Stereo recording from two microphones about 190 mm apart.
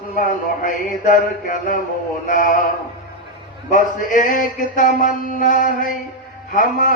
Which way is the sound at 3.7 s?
45° left (ahead or behind).